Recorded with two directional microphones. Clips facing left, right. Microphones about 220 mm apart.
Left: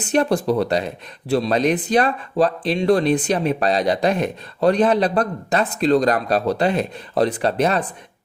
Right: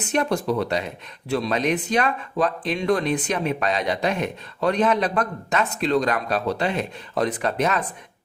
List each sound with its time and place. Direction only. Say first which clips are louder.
0.1 s speech: left 4 dB; 35° left (ahead or behind)